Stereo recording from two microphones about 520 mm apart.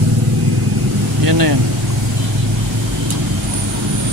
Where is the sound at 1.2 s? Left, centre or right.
Right.